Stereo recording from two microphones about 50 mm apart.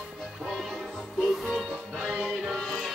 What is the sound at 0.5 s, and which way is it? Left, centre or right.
Music, centre.